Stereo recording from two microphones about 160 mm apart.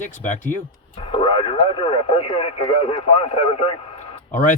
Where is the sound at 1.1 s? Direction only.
30° left (ahead or behind).